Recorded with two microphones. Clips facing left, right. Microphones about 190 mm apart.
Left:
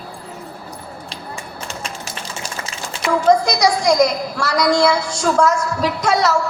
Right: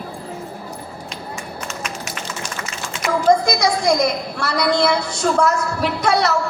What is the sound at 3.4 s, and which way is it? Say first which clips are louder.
A woman's voice: left 2 dB; 55° right (ahead or behind).